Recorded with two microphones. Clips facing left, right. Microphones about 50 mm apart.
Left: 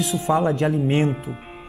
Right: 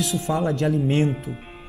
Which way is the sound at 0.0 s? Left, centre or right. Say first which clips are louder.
Left 3 dB; centre.